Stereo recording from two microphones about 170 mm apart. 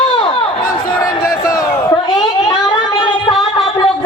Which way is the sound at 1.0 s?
20° left (ahead or behind).